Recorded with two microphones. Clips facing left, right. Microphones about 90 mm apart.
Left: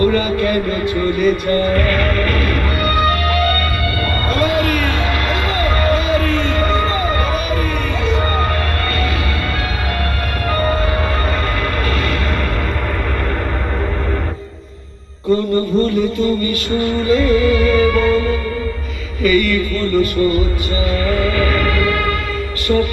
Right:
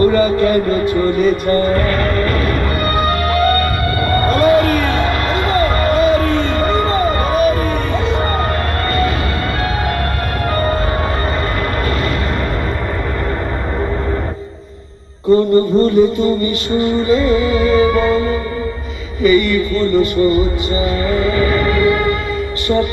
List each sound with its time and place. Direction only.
0.0 s music: 35° right (ahead or behind)
15.3 s music: 35° right (ahead or behind)